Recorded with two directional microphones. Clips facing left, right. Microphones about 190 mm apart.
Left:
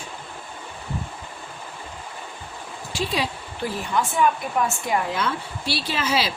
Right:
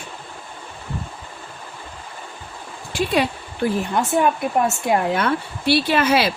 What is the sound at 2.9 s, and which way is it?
Speech, 55° right (ahead or behind).